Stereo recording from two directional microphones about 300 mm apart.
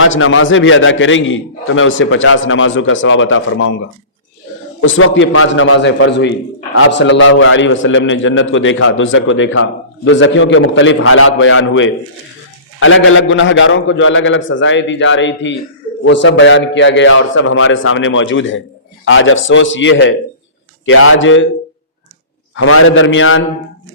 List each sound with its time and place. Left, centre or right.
0.0 s a man's voice: left
22.5 s a man's voice: left